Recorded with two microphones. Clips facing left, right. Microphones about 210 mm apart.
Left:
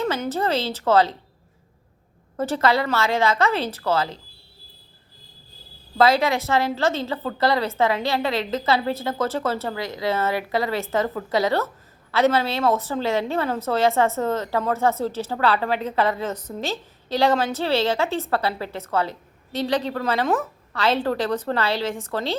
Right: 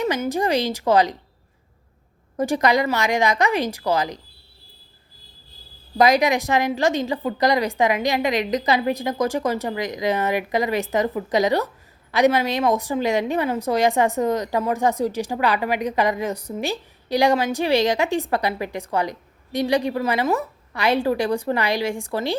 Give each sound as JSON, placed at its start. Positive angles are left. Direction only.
{"t": 0.0, "sound": "a woman's voice", "side_deg": -15}
{"t": 2.3, "sound": "a woman's voice", "side_deg": -15}
{"t": 6.0, "sound": "a woman's voice", "side_deg": -15}